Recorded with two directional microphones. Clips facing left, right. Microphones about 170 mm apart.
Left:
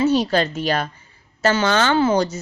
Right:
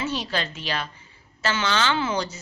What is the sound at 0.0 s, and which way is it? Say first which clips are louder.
Speech: left 10 dB; 40° left (ahead or behind).